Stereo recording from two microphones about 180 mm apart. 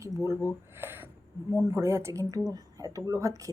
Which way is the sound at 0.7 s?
10° right (ahead or behind).